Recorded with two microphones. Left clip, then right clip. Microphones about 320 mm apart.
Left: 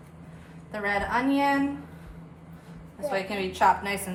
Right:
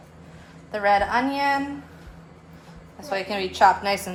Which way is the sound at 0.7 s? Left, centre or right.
Centre.